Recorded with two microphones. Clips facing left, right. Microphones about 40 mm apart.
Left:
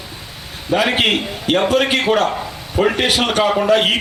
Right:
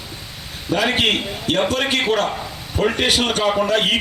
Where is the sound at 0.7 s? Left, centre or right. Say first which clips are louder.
Left 2 dB; centre.